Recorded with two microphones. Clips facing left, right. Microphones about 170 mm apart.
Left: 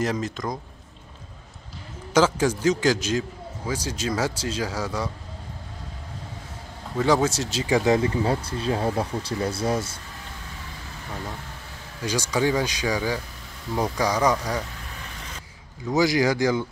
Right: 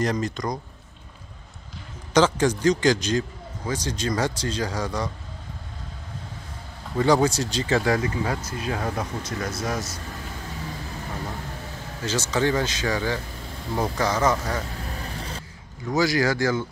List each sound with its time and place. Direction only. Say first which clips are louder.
0.0 s a man's voice: right 1 dB; 5° left (ahead or behind)
2.1 s a man's voice: right 1 dB; 5° left (ahead or behind)
7.0 s a man's voice: right 1 dB; centre (ahead or behind)
7.7 s speech: left 3 dB; 20° left (ahead or behind)
12.0 s speech: even; 15° left (ahead or behind)
15.0 s vehicle: right 5 dB; 35° right (ahead or behind)
15.9 s speech: left 1 dB; 20° left (ahead or behind)